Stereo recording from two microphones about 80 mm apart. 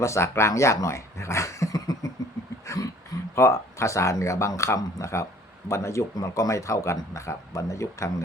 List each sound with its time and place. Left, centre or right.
0.0 s speech: left
2.6 s a sound: left
3.3 s speech: left